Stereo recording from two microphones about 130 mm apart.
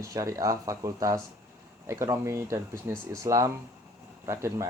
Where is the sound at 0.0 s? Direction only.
25° right (ahead or behind).